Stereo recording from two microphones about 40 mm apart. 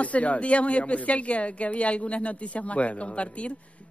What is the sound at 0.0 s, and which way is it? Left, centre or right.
Speech, left.